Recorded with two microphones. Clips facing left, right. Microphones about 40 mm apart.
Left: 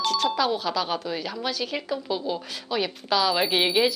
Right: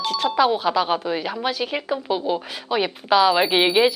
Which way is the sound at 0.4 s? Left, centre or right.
Right.